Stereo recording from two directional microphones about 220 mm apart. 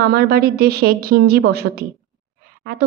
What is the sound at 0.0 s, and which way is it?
Speech, 45° right (ahead or behind).